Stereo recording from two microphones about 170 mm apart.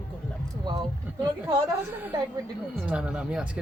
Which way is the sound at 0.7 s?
25° right (ahead or behind).